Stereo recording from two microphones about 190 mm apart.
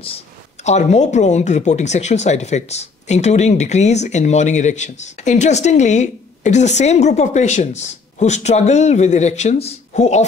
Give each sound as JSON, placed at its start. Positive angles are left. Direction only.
{"t": 0.7, "sound": "speech", "side_deg": 35}